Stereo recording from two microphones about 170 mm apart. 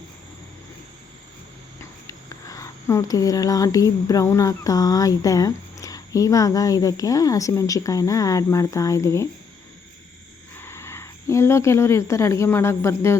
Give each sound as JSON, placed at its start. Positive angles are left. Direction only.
{"t": 1.8, "sound": "speech", "side_deg": 20}
{"t": 10.6, "sound": "speech", "side_deg": 15}